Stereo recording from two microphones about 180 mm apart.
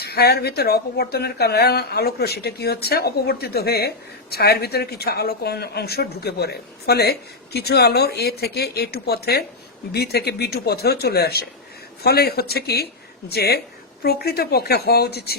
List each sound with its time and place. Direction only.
0.0 s speech: 60° left (ahead or behind)